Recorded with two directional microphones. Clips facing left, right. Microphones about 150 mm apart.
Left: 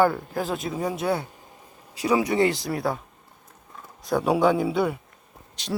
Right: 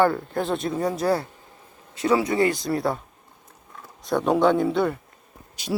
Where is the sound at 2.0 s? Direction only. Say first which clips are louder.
Right 1 dB; 15° left (ahead or behind).